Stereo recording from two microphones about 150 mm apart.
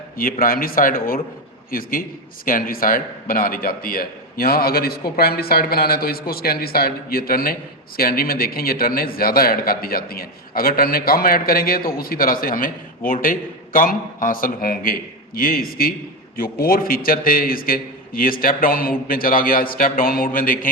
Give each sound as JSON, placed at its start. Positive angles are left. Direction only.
{"t": 0.2, "sound": "a man's voice", "side_deg": 75}